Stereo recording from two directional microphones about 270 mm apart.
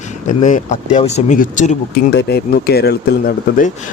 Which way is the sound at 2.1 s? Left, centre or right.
Left.